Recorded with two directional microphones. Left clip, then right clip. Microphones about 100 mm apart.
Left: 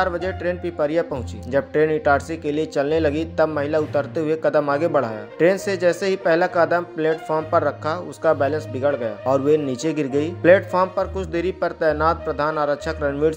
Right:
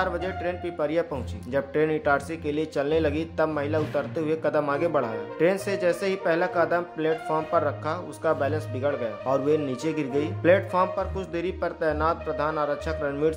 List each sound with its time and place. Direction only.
0.0 s speech: 35° left (ahead or behind)